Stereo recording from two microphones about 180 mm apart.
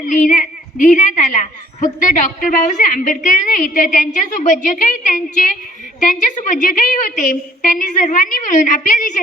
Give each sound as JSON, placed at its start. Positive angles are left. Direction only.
{"t": 0.0, "sound": "a woman's voice", "side_deg": 45}